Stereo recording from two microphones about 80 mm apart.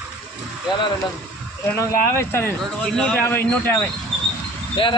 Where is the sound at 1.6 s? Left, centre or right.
Left.